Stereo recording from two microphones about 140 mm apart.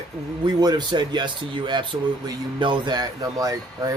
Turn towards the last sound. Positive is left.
turn(degrees=-25)  # may be behind; listen again after turning